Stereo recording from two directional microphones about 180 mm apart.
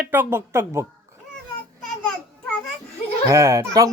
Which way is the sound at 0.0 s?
10° right (ahead or behind).